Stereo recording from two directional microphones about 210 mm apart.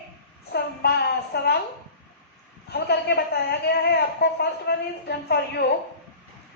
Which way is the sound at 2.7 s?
50° left (ahead or behind).